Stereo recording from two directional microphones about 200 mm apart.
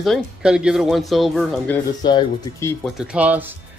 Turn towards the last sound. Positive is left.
turn(degrees=-10)  # may be behind; listen again after turning